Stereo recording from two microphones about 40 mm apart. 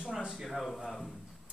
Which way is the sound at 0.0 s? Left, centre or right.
Centre.